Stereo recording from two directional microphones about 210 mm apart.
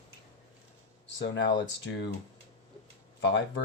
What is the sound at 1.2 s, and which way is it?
Speech, 55° left (ahead or behind).